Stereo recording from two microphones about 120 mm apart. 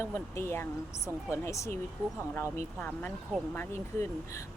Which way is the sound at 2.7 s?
15° left (ahead or behind).